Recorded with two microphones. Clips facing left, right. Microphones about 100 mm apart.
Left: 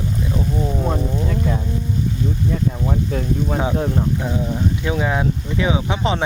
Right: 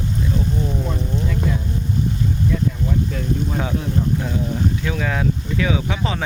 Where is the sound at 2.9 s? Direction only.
40° left (ahead or behind).